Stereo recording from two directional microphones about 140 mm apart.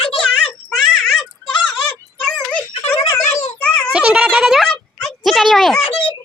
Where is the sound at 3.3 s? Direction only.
50° left (ahead or behind).